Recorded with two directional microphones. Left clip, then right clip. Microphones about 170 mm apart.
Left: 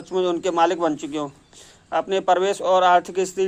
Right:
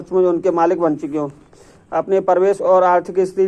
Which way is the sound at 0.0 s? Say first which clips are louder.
Right 7 dB; 30° left (ahead or behind).